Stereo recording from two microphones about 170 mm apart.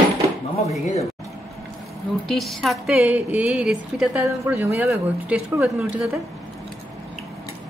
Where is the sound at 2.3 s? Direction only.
Centre (ahead or behind).